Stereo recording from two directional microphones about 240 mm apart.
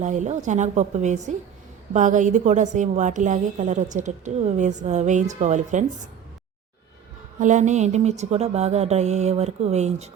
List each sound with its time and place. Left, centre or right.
0.0 s a woman's voice: right
7.3 s speech: right